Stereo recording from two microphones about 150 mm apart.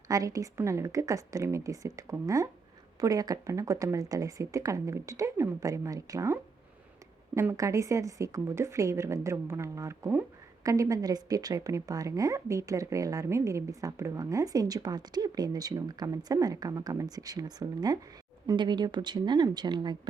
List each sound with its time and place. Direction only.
0.1 s a woman's voice: 20° right (ahead or behind)